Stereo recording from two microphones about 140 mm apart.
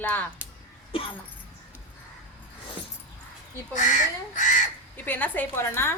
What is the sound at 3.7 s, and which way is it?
Speech, 65° left (ahead or behind).